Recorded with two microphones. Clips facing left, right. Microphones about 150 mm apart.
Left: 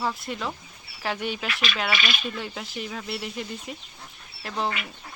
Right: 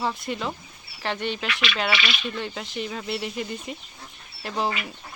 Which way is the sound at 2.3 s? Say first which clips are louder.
Right 2 dB; 5° left (ahead or behind).